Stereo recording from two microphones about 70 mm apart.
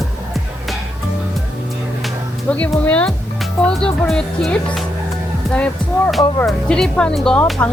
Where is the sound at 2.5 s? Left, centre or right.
Centre.